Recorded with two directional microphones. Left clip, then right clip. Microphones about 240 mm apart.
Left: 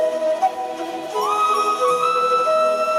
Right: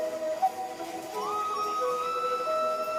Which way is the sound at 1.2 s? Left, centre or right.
Left.